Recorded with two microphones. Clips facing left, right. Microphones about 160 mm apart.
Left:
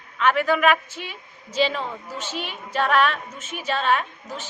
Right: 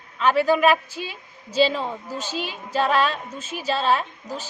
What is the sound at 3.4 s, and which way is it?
Speech, 35° right (ahead or behind).